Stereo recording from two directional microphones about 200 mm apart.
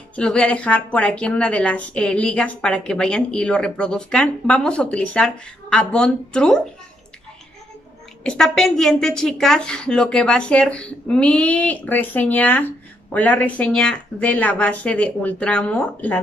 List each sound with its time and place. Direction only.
0.1 s speech: 5° left (ahead or behind)
8.2 s a woman's voice: 5° left (ahead or behind)